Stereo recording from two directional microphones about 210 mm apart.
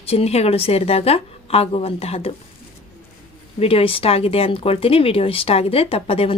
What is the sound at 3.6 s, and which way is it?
A woman's voice, 25° left (ahead or behind).